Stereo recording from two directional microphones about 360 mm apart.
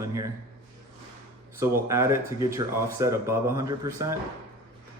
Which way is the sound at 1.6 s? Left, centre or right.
Centre.